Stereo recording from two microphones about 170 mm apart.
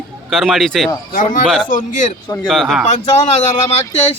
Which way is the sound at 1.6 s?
50° left (ahead or behind).